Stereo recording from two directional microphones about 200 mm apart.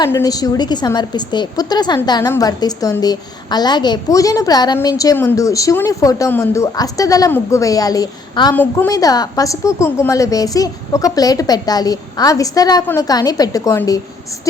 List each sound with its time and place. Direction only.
0.0 s a woman's voice: 15° left (ahead or behind)